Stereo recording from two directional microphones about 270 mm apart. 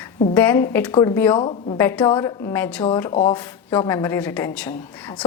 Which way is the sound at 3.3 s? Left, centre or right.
Centre.